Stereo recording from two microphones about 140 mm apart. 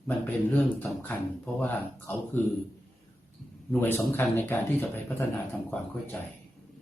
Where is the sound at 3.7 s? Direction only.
15° left (ahead or behind).